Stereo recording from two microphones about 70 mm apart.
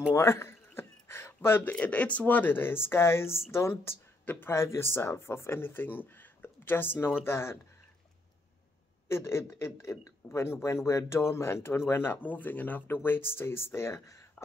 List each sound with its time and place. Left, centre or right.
0.1 s a sound: left
1.6 s speech: left
9.1 s speech: left